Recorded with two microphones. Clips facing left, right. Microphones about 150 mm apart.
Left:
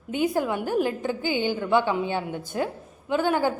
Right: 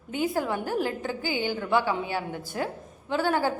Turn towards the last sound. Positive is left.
turn(degrees=20)  # may be behind; listen again after turning